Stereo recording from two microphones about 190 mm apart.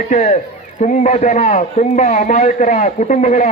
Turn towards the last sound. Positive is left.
turn(degrees=35)  # may be behind; listen again after turning